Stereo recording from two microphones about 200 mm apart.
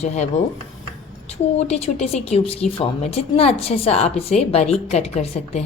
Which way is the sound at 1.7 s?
30° left (ahead or behind).